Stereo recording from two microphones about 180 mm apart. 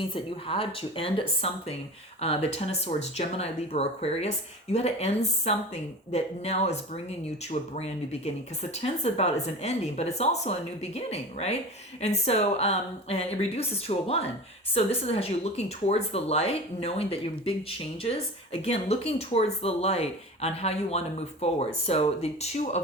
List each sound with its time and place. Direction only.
0.1 s speech: 30° left (ahead or behind)
8.7 s speech: 35° left (ahead or behind)